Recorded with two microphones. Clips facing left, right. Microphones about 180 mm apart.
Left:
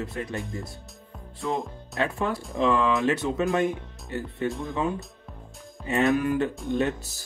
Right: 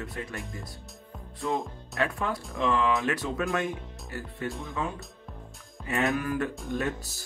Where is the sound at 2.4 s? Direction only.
Centre (ahead or behind).